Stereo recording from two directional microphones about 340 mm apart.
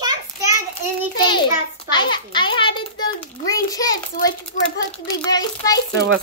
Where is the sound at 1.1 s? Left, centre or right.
Centre.